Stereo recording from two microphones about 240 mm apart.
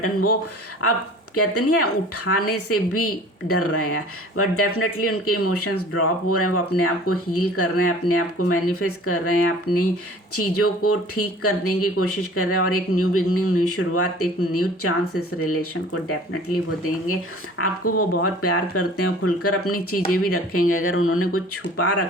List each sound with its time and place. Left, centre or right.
0.0 s speech: left
1.4 s speech: left